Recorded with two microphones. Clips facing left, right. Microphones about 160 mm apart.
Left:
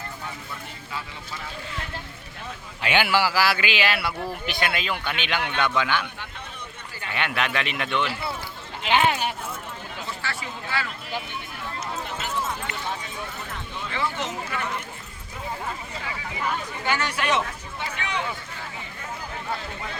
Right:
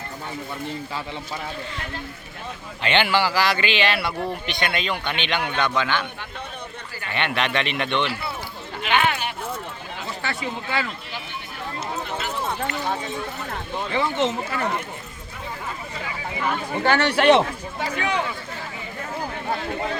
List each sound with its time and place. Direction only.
2.8 s a man's voice: 10° left (ahead or behind)
7.1 s speech: 5° left (ahead or behind)
8.8 s speech: 25° left (ahead or behind)
10.2 s speech: 20° right (ahead or behind)
12.1 s clip-clop: 35° right (ahead or behind)
13.9 s speech: 25° right (ahead or behind)
16.7 s speech: 65° right (ahead or behind)
17.7 s speech: 40° right (ahead or behind)